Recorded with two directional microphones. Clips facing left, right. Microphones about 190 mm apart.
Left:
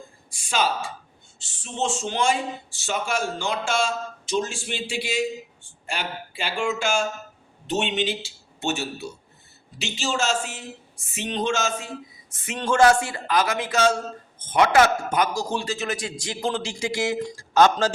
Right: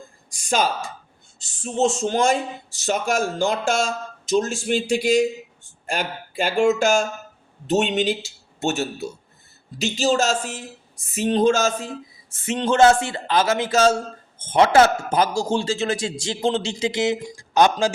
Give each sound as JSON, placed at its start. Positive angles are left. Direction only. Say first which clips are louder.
{"t": 0.3, "sound": "a man's voice", "louder": "right 3 dB", "side_deg": -45}
{"t": 12.3, "sound": "speech", "louder": "right 4 dB", "side_deg": -25}